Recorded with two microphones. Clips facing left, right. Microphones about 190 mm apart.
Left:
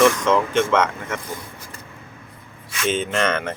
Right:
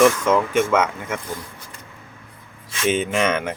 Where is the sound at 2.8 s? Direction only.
10° right (ahead or behind).